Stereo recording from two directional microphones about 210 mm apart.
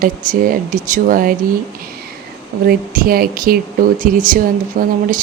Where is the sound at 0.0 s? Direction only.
40° right (ahead or behind).